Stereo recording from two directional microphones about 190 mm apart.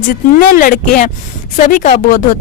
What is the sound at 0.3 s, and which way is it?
A woman's voice, 45° left (ahead or behind).